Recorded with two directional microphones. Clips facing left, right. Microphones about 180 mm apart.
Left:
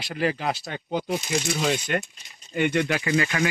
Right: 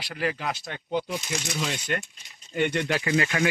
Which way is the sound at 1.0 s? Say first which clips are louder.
Left 5 dB; 45° left (ahead or behind).